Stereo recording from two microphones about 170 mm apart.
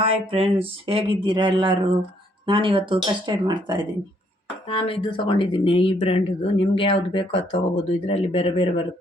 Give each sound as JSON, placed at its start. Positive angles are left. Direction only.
{"t": 0.0, "sound": "speech", "side_deg": -35}
{"t": 4.7, "sound": "speech", "side_deg": 35}